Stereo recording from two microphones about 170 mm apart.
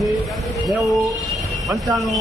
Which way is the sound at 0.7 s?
Centre (ahead or behind).